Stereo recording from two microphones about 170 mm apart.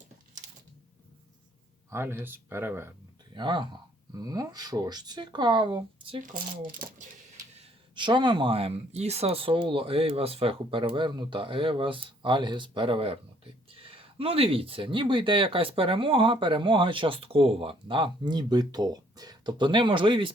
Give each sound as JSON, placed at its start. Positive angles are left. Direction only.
{"t": 1.9, "sound": "speech", "side_deg": -15}
{"t": 3.3, "sound": "speech", "side_deg": -25}
{"t": 6.2, "sound": "speech", "side_deg": -55}
{"t": 7.6, "sound": "speech", "side_deg": -30}